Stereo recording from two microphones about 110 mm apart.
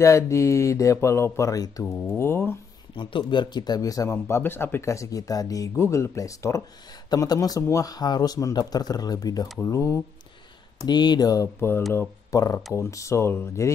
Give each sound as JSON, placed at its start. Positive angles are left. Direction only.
{"t": 0.0, "sound": "speech", "side_deg": 25}
{"t": 3.0, "sound": "speech", "side_deg": 50}
{"t": 10.9, "sound": "speech", "side_deg": 40}